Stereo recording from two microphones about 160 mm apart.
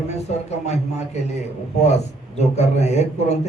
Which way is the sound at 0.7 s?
45° left (ahead or behind).